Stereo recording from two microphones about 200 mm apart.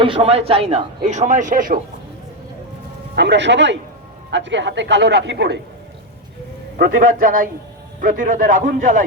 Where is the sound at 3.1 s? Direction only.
60° right (ahead or behind).